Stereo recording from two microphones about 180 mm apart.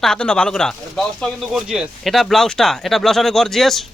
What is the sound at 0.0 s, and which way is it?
Speech, 5° left (ahead or behind).